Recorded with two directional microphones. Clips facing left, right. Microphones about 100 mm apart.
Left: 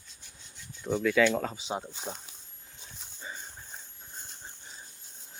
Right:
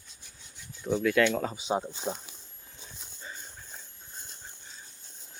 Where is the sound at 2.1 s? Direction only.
40° right (ahead or behind).